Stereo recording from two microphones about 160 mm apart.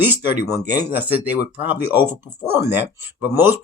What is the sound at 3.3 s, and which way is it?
Speech, 90° left.